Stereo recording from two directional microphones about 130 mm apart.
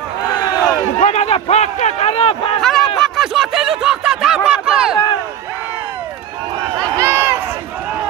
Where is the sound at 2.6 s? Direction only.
Centre (ahead or behind).